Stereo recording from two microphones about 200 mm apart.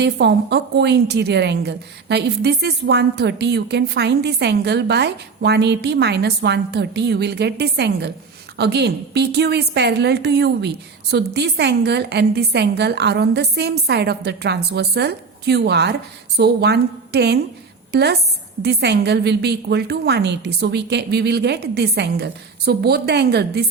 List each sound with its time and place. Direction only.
0.0 s a woman's voice: 60° right (ahead or behind)